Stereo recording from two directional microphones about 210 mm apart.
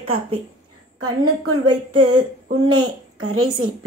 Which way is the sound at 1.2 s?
90° right.